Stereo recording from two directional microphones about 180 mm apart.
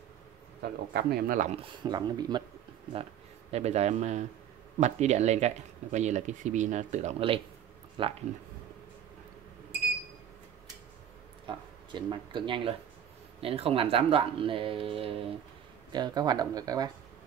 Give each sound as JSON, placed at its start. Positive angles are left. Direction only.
{"t": 0.6, "sound": "speech", "side_deg": -60}
{"t": 1.6, "sound": "speech", "side_deg": -25}
{"t": 3.5, "sound": "speech", "side_deg": -35}
{"t": 11.4, "sound": "speech", "side_deg": -25}